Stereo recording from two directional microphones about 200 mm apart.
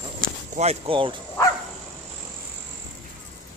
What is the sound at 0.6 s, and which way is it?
Speech, 30° right (ahead or behind).